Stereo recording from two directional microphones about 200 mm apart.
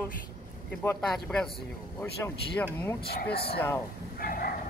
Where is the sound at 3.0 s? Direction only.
50° left (ahead or behind).